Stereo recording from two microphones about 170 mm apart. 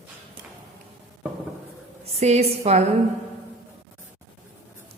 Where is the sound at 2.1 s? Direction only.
40° right (ahead or behind).